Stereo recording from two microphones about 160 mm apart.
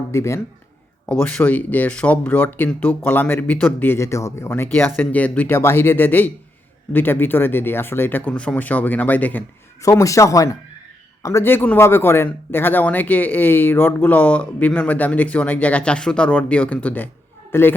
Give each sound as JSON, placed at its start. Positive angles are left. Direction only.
{"t": 0.1, "sound": "a woman's voice", "side_deg": 15}